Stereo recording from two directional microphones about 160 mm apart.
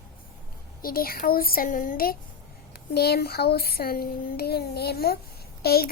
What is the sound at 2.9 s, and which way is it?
Child singing, 85° left.